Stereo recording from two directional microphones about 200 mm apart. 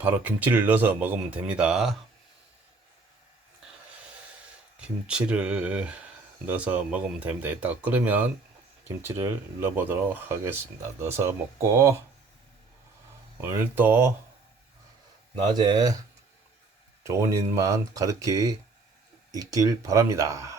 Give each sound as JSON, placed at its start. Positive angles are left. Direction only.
{"t": 0.0, "sound": "speech", "side_deg": -10}
{"t": 3.6, "sound": "a sound", "side_deg": -5}
{"t": 4.8, "sound": "speech", "side_deg": -5}
{"t": 13.4, "sound": "speech", "side_deg": -10}
{"t": 15.5, "sound": "speech", "side_deg": -20}
{"t": 17.0, "sound": "speech", "side_deg": -15}